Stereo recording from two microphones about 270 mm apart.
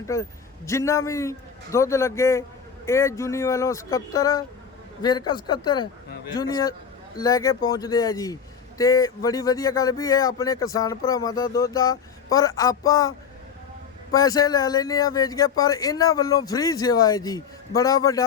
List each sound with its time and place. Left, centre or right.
0.1 s speech: centre